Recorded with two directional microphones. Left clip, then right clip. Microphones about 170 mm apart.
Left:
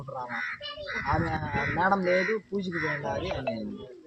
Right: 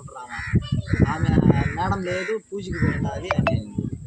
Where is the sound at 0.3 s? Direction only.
15° right (ahead or behind).